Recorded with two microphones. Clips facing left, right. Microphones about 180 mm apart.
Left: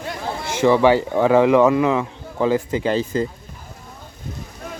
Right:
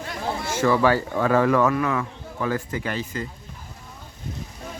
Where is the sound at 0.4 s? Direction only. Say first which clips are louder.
Left 5 dB; 20° left (ahead or behind).